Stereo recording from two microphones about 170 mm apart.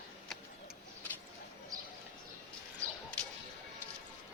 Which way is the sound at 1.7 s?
20° right (ahead or behind).